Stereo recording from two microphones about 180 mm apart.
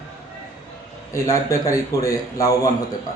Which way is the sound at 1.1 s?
20° left (ahead or behind).